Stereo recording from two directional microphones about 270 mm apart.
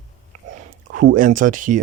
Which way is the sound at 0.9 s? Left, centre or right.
Right.